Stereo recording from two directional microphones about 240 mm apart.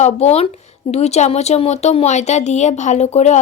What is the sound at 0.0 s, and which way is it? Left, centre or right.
Speech, left.